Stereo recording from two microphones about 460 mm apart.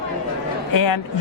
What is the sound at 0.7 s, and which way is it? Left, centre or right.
Speech, left.